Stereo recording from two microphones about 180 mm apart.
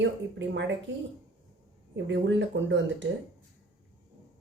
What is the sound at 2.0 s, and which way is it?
Speech, 85° right.